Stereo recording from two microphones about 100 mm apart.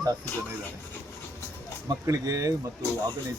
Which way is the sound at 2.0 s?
35° right (ahead or behind).